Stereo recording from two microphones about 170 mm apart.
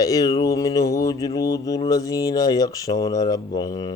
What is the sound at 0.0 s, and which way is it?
Speech, 20° left (ahead or behind).